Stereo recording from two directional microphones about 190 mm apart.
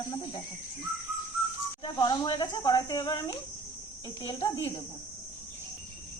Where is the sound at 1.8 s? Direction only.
20° left (ahead or behind).